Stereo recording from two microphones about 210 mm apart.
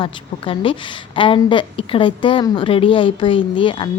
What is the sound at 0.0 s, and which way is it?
A woman's voice, 25° left (ahead or behind).